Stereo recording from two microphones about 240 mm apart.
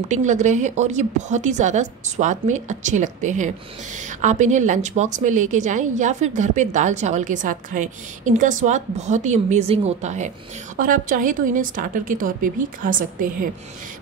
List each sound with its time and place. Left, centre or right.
0.1 s a woman's voice: right